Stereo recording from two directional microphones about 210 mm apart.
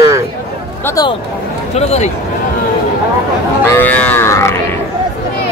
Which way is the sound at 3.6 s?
10° left (ahead or behind).